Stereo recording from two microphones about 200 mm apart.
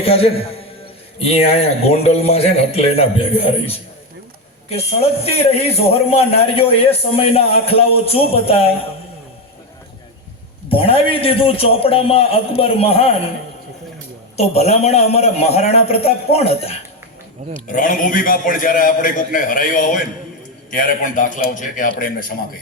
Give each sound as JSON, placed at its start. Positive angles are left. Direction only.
{"t": 0.0, "sound": "a man's voice", "side_deg": 30}
{"t": 10.7, "sound": "a man's voice", "side_deg": 30}
{"t": 14.3, "sound": "a man's voice", "side_deg": 30}
{"t": 17.7, "sound": "a man's voice", "side_deg": 40}